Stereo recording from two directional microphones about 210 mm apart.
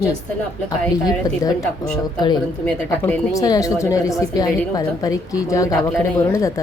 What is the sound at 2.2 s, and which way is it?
Speech, 20° left (ahead or behind).